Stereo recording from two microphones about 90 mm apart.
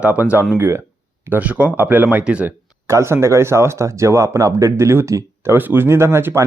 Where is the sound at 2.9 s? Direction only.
30° right (ahead or behind).